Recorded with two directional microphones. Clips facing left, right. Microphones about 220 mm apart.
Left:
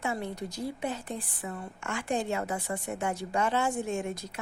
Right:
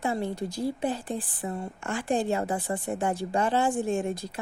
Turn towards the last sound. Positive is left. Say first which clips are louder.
# right 4 dB
turn(degrees=-30)  # may be behind; listen again after turning